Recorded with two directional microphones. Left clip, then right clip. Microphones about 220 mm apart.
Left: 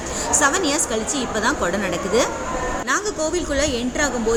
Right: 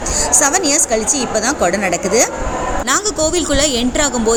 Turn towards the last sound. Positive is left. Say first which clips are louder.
# right 5 dB
turn(degrees=-35)  # may be behind; listen again after turning